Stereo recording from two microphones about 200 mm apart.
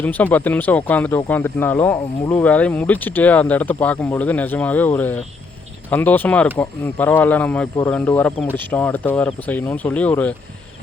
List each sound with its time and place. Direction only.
0.0 s speech: 10° left (ahead or behind)